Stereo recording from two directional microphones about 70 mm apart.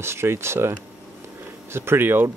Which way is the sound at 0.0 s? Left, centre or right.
Right.